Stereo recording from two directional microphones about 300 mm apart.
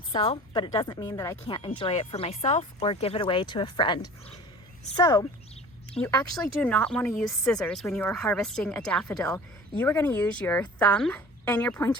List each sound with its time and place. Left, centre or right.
0.1 s a woman's voice: centre